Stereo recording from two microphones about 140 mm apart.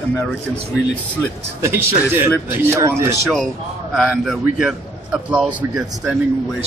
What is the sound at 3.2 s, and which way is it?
A man's voice, centre (ahead or behind).